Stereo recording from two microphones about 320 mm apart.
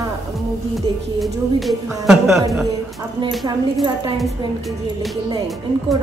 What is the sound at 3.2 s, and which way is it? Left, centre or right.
Speech, centre.